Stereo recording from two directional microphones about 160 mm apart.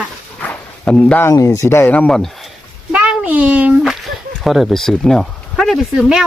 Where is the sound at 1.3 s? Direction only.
20° left (ahead or behind); by 2.3 s 5° left (ahead or behind).